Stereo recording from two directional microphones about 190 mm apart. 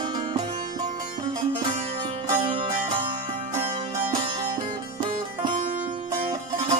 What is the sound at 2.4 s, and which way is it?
Music, 25° right (ahead or behind).